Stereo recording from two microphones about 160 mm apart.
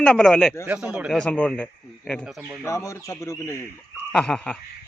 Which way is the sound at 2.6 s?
20° left (ahead or behind).